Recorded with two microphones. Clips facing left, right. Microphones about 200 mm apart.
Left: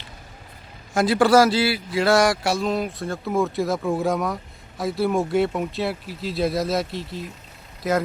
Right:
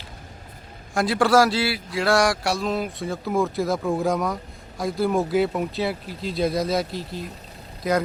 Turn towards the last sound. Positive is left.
turn(degrees=0)  # may be behind; listen again after turning